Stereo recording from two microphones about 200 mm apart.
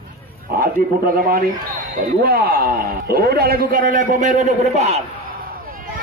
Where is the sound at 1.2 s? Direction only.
45° right (ahead or behind).